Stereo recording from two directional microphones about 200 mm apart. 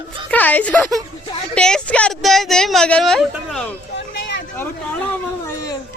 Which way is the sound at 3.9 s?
60° left (ahead or behind).